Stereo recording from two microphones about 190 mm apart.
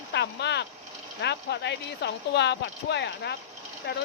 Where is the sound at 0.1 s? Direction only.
65° left (ahead or behind).